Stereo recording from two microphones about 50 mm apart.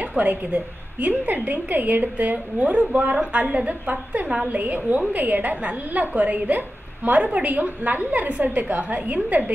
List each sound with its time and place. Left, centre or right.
0.0 s a woman's voice: right